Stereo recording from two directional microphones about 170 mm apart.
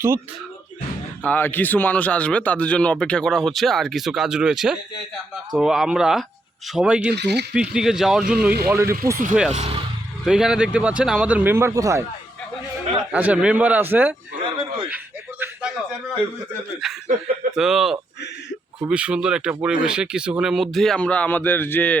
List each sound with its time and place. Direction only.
1.2 s speech: 10° left (ahead or behind); by 7.1 s 5° right (ahead or behind)
7.1 s speech: 80° right
7.5 s speech: 5° right (ahead or behind)
8.7 s speech: 15° right (ahead or behind)
9.5 s speech: 40° right (ahead or behind)
10.2 s speech: 5° right (ahead or behind); by 12.0 s 20° right (ahead or behind)
13.1 s speech: 10° right (ahead or behind)
14.4 s a sound: 30° right (ahead or behind)
14.8 s chuckle: 10° right (ahead or behind)
16.8 s speech: centre (ahead or behind)